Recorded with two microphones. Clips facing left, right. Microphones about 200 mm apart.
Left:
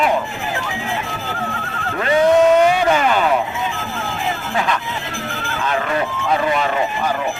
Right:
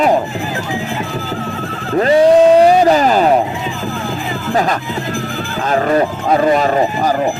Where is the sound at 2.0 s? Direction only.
35° right (ahead or behind).